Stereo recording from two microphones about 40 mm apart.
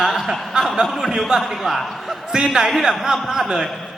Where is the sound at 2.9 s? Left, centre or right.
Centre.